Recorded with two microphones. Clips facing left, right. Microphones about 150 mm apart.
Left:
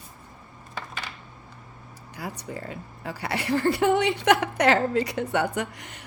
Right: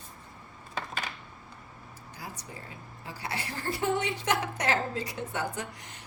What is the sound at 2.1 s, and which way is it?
Speech, 65° left (ahead or behind).